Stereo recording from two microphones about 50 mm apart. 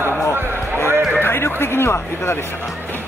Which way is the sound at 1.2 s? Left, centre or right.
Left.